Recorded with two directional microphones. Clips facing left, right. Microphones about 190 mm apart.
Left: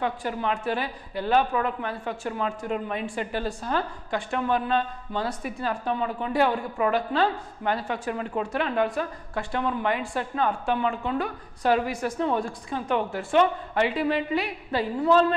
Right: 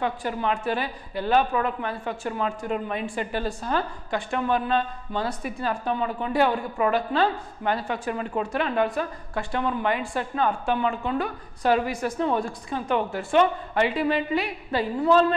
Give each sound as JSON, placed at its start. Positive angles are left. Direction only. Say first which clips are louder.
{"t": 0.0, "sound": "a woman's voice", "louder": "right 1 dB", "side_deg": -15}